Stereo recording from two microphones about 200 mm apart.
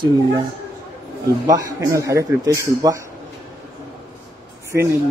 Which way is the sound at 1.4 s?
15° right (ahead or behind).